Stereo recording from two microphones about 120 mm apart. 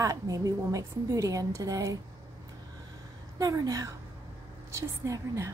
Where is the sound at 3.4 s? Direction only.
30° right (ahead or behind).